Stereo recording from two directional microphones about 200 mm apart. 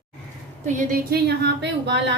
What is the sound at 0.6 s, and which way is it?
A woman's voice, 40° right (ahead or behind).